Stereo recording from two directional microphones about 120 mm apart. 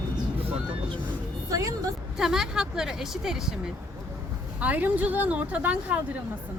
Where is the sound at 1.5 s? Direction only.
30° right (ahead or behind).